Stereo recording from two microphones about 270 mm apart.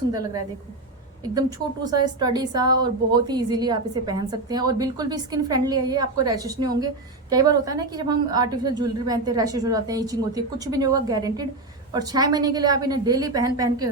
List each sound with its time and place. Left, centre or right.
1.2 s a woman's voice: centre